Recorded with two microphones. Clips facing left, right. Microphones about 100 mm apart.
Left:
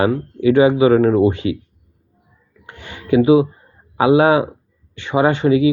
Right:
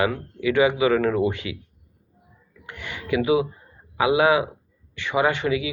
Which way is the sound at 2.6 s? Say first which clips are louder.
Left 7 dB; 30° left (ahead or behind).